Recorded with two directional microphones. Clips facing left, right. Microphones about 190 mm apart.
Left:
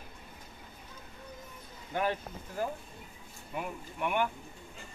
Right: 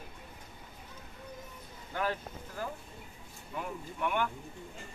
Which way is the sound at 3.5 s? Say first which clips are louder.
Left 1 dB; 15° left (ahead or behind).